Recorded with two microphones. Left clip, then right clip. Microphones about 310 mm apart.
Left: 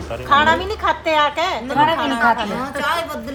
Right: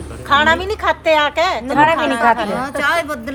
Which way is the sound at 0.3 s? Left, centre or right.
Right.